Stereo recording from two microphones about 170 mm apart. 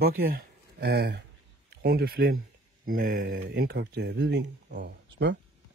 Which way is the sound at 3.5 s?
70° right (ahead or behind).